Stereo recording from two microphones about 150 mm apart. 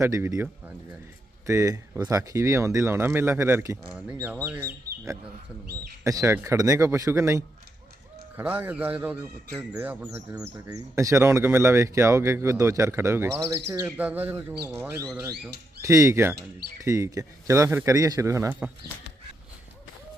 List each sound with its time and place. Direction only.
0.0 s speech: 20° right (ahead or behind)
6.0 s speech: 20° right (ahead or behind)